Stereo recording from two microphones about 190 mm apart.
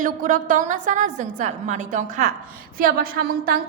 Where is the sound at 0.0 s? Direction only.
45° right (ahead or behind).